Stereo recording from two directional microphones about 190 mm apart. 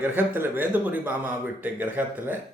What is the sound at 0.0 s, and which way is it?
Speech, 10° right (ahead or behind).